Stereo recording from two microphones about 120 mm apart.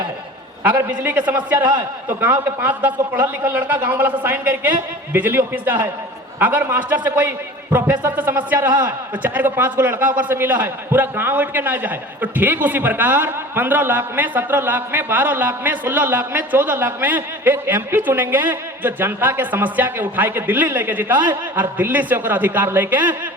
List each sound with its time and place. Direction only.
0.6 s a man's voice: 15° right (ahead or behind)
1.5 s a man's voice: 35° right (ahead or behind)
2.6 s a man's voice: 15° right (ahead or behind)